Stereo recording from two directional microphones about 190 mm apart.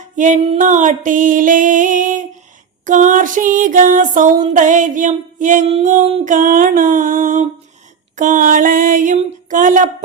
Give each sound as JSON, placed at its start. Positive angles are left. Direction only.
{"t": 0.2, "sound": "music", "side_deg": -40}